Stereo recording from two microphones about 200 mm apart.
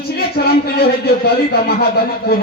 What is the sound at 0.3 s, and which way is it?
Speech, 55° left (ahead or behind).